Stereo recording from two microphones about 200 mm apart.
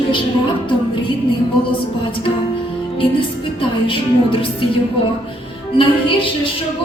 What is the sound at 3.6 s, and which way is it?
Speech, 25° left (ahead or behind).